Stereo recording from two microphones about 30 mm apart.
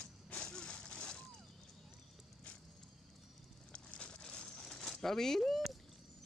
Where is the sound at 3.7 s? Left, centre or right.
Left.